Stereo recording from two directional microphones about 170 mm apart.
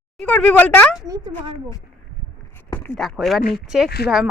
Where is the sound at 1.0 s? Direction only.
20° right (ahead or behind).